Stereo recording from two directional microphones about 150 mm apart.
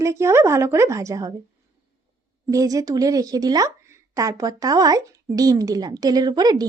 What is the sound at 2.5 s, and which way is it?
Speech, 20° right (ahead or behind).